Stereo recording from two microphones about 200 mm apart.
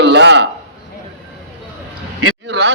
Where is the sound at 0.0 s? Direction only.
60° right (ahead or behind).